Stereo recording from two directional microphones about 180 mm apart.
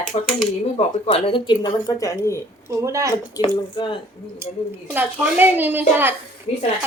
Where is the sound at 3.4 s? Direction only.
25° left (ahead or behind).